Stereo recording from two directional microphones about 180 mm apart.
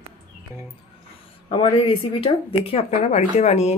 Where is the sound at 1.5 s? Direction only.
30° left (ahead or behind).